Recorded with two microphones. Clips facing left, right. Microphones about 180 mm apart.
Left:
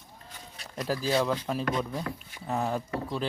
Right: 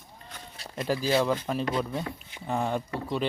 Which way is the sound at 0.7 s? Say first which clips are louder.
Right 2 dB; centre (ahead or behind).